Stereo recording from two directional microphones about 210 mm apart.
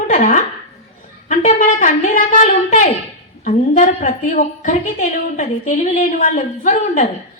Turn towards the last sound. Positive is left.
turn(degrees=40)  # may be behind; listen again after turning